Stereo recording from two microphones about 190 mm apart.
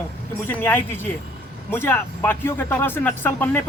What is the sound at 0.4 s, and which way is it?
Speech, 10° left (ahead or behind).